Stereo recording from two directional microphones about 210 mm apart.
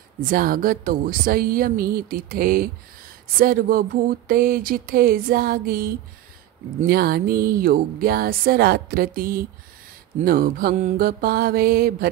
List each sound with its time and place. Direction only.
0.2 s speech: 40° right (ahead or behind)